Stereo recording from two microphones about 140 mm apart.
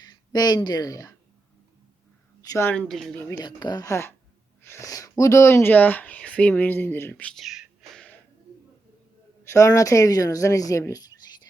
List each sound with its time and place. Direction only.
0.0 s speech: 30° left (ahead or behind)
2.4 s a sound: 25° left (ahead or behind)
2.6 s speech: 5° left (ahead or behind)
3.2 s speech: 30° left (ahead or behind); by 8.0 s 5° right (ahead or behind)
9.4 s speech: 20° left (ahead or behind)